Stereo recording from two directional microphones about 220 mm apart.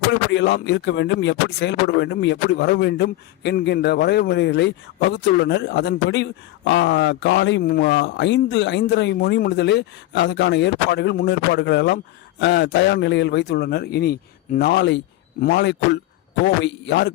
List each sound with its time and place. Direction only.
0.1 s speech: 55° left (ahead or behind)